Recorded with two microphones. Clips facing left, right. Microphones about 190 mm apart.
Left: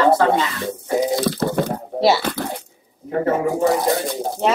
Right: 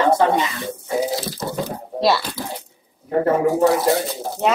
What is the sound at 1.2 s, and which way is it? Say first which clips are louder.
Speech: left 6 dB; 60° left (ahead or behind).